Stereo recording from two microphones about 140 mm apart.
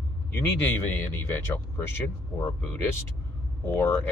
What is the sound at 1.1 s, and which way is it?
Speech, 15° left (ahead or behind).